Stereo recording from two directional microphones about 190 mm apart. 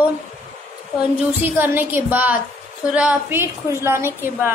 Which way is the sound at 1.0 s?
10° right (ahead or behind).